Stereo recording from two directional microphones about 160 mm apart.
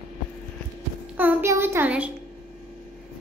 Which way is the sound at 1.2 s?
15° right (ahead or behind).